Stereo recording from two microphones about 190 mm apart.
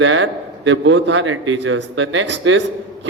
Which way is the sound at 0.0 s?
80° right.